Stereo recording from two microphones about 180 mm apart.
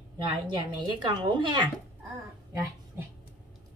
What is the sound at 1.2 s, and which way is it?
Speech, 25° right (ahead or behind).